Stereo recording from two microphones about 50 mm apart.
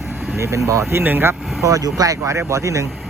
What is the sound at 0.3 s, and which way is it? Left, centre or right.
Speech, right.